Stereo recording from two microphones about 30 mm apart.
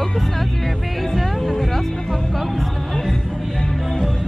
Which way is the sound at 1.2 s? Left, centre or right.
Centre.